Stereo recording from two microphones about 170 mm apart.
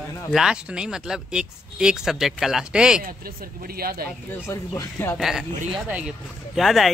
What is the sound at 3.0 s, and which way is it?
Speech, 60° right (ahead or behind).